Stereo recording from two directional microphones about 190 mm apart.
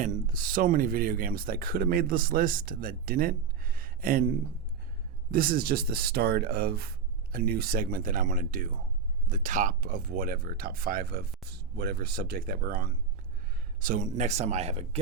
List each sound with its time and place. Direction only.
0.0 s speech: 45° right (ahead or behind)